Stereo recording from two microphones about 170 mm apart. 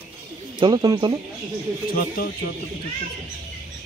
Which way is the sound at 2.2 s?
60° left (ahead or behind).